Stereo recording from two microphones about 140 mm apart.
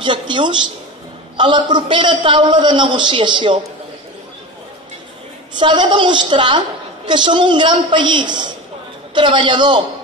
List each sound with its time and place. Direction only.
0.0 s a man's voice: 35° right (ahead or behind)
5.6 s a man's voice: 35° right (ahead or behind)